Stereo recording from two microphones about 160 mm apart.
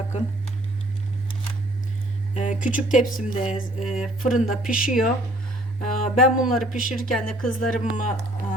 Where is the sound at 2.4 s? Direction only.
50° left (ahead or behind).